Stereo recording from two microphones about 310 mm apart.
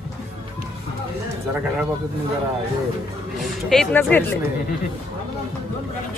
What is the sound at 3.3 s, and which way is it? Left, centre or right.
A woman's voice, centre.